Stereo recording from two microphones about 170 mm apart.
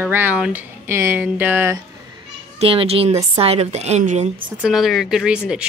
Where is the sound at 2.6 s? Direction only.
35° right (ahead or behind).